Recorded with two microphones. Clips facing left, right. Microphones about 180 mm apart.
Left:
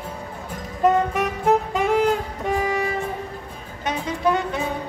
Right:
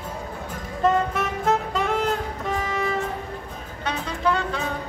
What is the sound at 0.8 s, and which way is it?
Music, 15° left (ahead or behind).